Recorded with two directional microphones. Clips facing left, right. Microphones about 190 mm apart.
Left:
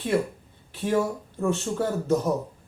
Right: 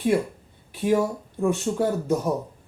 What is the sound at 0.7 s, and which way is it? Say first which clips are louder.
Speech: right 3 dB; 15° right (ahead or behind).